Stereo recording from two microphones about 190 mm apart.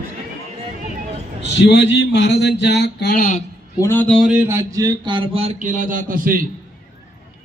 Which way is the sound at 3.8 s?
10° left (ahead or behind).